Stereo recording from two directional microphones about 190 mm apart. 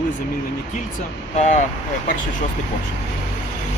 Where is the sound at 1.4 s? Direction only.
35° left (ahead or behind).